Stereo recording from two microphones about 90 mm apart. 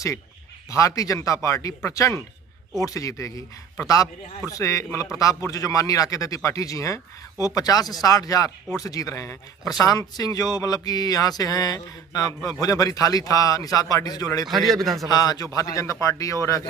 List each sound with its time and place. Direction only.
0.7 s speech: 40° left (ahead or behind)
14.5 s a man's voice: centre (ahead or behind)
15.0 s speech: 45° left (ahead or behind)